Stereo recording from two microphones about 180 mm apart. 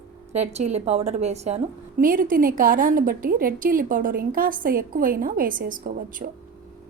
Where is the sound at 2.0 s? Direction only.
50° right (ahead or behind).